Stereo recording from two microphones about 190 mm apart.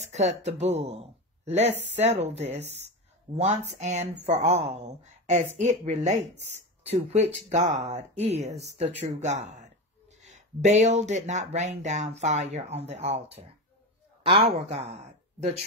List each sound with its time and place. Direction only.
0.0 s speech: 35° right (ahead or behind)
14.2 s speech: 30° right (ahead or behind)